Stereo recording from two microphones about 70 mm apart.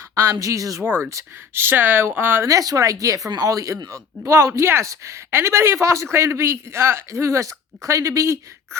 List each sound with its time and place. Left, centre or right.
0.1 s speech: right
0.8 s speech: right
2.5 s speech: right